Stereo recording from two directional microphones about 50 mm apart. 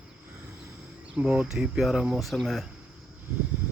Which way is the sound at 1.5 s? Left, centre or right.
Centre.